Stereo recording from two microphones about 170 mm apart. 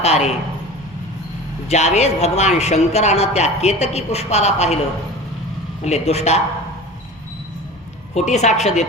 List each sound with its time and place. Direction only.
0.0 s speech: 40° left (ahead or behind)
1.6 s speech: 40° left (ahead or behind)
5.8 s speech: 40° left (ahead or behind)
8.1 s speech: 40° left (ahead or behind)